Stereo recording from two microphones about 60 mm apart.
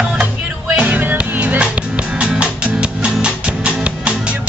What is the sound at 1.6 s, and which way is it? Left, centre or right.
Music, centre.